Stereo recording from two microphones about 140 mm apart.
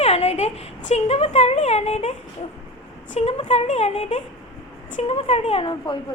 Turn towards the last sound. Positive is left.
turn(degrees=35)  # may be behind; listen again after turning